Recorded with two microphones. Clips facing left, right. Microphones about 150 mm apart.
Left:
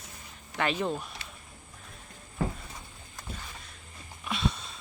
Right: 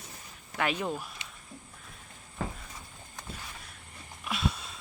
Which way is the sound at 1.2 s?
20° right (ahead or behind).